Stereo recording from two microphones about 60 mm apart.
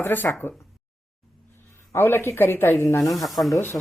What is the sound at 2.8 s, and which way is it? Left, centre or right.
Speech, left.